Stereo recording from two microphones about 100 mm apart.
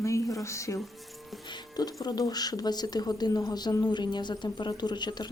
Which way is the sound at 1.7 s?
40° left (ahead or behind).